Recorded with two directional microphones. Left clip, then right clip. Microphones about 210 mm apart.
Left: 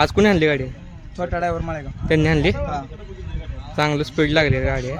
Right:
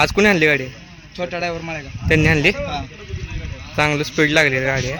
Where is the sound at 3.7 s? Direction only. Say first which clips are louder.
Right 2 dB; 5° left (ahead or behind).